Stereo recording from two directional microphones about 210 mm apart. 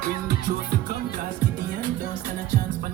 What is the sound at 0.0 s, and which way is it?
Music, 45° right (ahead or behind).